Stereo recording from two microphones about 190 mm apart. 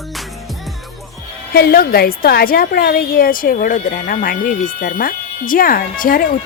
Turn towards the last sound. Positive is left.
turn(degrees=50)  # may be behind; listen again after turning